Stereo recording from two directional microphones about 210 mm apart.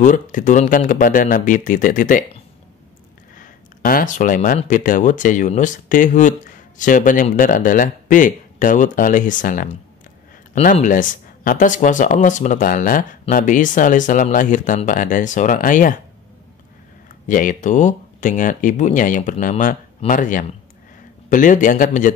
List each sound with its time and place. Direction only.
0.0 s speech: 40° left (ahead or behind)
3.3 s speech: 40° left (ahead or behind)
17.3 s speech: 40° left (ahead or behind)